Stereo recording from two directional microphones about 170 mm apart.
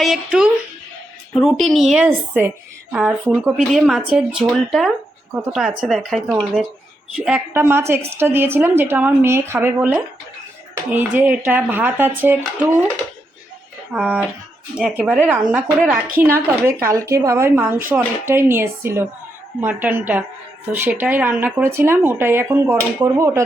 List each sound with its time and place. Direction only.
0.0 s speech: 5° right (ahead or behind)
2.0 s speech: 10° right (ahead or behind)
13.9 s speech: 5° right (ahead or behind)